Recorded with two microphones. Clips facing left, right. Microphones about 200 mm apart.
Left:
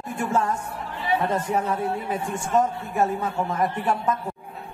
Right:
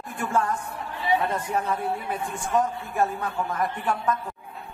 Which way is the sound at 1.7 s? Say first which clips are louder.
Left 2 dB; 25° left (ahead or behind).